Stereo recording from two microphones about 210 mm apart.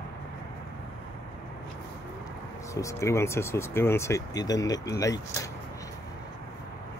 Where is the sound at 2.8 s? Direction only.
15° left (ahead or behind).